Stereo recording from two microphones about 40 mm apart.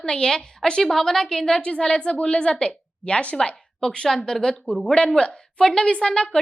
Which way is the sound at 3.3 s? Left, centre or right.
Centre.